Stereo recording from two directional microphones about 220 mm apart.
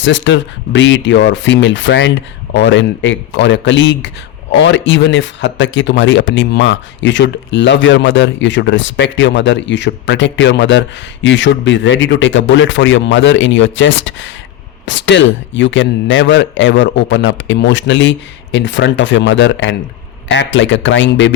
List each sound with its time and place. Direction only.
0.0 s speech: 55° left (ahead or behind)